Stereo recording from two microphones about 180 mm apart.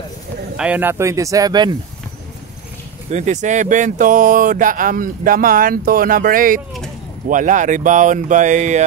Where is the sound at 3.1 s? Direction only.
40° right (ahead or behind).